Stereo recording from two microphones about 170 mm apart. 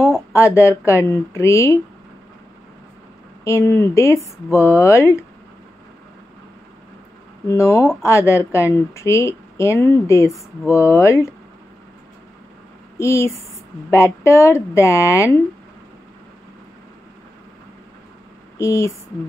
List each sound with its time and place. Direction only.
0.0 s a sound: 15° left (ahead or behind)
0.6 s speech: 15° left (ahead or behind)
3.4 s speech: 15° left (ahead or behind)
7.4 s speech: 15° left (ahead or behind)
12.9 s speech: 15° left (ahead or behind)
18.6 s speech: 15° left (ahead or behind)